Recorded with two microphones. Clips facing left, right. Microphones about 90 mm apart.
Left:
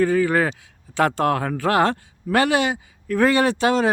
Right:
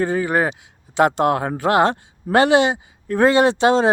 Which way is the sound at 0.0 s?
25° right (ahead or behind).